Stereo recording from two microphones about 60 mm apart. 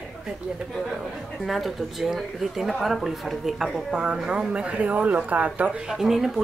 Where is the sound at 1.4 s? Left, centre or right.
Centre.